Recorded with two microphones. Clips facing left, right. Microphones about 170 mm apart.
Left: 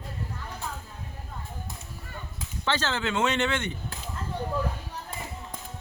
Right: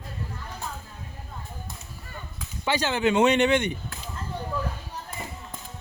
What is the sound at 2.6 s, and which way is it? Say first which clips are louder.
Speech: right 4 dB; 15° right (ahead or behind).